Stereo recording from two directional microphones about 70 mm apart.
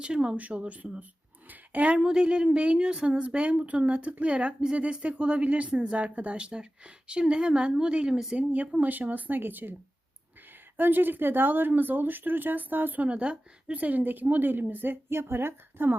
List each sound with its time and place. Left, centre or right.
0.0 s speech: centre
1.5 s a sound: right
2.0 s speech: centre; by 9.7 s right
10.8 s speech: right